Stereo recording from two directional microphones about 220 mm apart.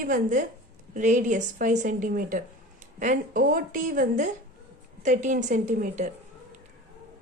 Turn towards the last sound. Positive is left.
turn(degrees=-35)  # may be behind; listen again after turning